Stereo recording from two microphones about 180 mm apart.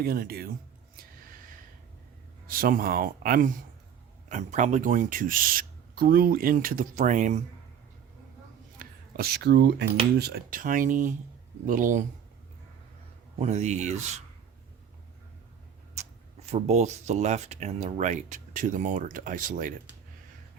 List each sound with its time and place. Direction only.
0.0 s speech: 55° right (ahead or behind)
2.5 s speech: 50° right (ahead or behind)
8.8 s speech: 55° right (ahead or behind)
13.4 s speech: 40° right (ahead or behind)
16.5 s speech: 40° right (ahead or behind)